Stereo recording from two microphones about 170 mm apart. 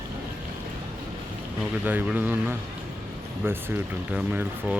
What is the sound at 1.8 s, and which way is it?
Speech, 10° right (ahead or behind).